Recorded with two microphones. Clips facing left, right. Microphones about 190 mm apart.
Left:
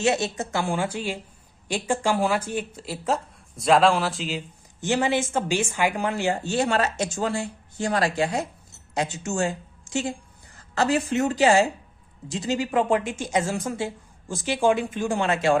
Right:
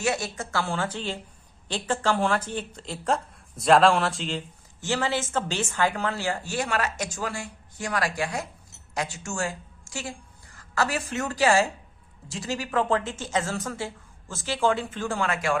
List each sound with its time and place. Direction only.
0.0 s a woman's voice: 25° left (ahead or behind); by 4.4 s 5° left (ahead or behind)
4.8 s a woman's voice: 15° left (ahead or behind)